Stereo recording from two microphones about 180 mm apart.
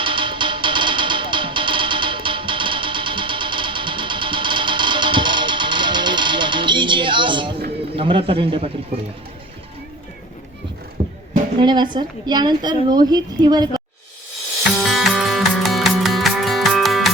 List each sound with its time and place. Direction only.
0.0 s music: 30° right (ahead or behind)
7.9 s a man's voice: 30° right (ahead or behind)
11.6 s a woman's voice: 25° right (ahead or behind)
14.8 s music: centre (ahead or behind)